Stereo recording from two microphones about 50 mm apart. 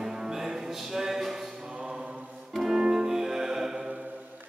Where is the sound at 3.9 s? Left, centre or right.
Right.